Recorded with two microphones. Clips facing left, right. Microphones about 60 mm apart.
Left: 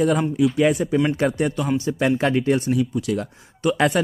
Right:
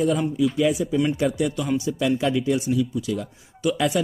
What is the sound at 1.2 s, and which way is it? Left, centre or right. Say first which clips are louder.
Speech: left 2 dB; left.